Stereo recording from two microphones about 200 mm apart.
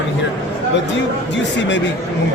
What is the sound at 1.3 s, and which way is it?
Speech, 65° left (ahead or behind).